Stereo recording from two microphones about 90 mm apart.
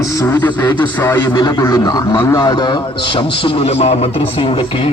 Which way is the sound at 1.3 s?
50° left (ahead or behind).